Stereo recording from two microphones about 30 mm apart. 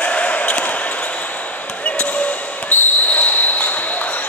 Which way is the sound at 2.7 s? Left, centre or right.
Left.